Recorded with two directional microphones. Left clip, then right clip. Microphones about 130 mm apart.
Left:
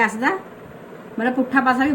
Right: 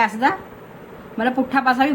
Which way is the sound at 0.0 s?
25° right (ahead or behind).